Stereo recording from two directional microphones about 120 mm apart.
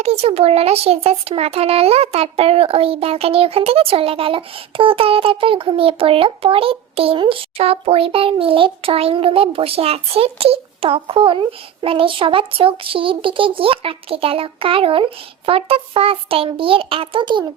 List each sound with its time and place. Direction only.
0.0 s a child's voice: 60° right (ahead or behind); by 17.4 s 40° right (ahead or behind)